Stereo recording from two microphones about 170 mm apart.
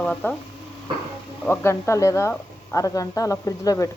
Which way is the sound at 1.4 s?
15° left (ahead or behind).